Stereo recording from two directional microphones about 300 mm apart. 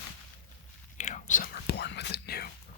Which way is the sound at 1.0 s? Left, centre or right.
Left.